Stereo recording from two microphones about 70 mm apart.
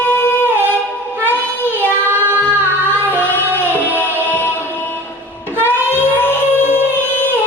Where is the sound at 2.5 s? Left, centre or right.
Left.